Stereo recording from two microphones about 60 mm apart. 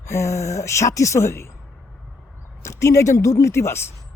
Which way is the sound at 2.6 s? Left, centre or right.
Left.